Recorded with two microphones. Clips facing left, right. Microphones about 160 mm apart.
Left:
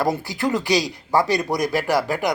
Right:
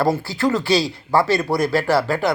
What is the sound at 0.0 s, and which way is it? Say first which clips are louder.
Speech: right 3 dB; 15° left (ahead or behind).